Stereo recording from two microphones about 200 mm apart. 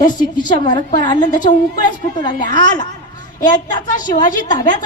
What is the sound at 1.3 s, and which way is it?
Speech, 40° left (ahead or behind).